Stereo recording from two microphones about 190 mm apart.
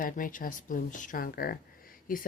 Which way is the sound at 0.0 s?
45° left (ahead or behind).